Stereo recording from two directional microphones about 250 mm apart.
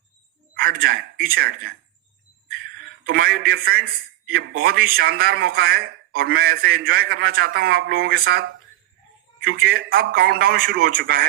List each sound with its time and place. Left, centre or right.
0.5 s a sound: right
0.8 s a man's voice: right
3.1 s a man's voice: right
9.7 s a man's voice: right